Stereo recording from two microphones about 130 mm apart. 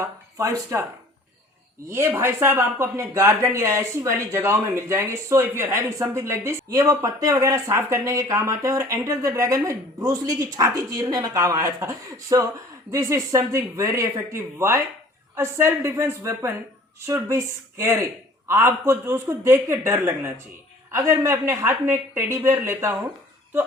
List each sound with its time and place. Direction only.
0.0 s speech: 25° right (ahead or behind)
1.9 s speech: 20° right (ahead or behind)